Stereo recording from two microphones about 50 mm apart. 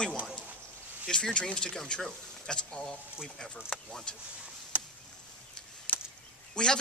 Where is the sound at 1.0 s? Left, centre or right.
Centre.